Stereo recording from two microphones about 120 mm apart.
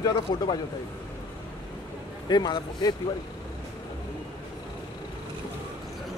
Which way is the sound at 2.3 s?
35° left (ahead or behind).